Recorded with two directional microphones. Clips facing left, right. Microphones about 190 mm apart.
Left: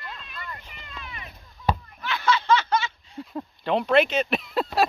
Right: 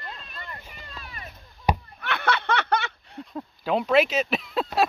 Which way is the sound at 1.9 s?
60° right (ahead or behind).